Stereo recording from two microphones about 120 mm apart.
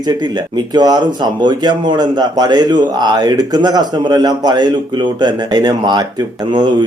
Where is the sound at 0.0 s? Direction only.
35° right (ahead or behind).